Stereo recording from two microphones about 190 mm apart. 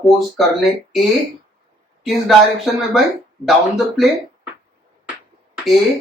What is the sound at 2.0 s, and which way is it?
Speech, centre (ahead or behind).